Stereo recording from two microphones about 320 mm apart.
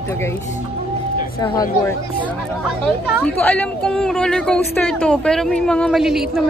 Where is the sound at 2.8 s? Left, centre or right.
Centre.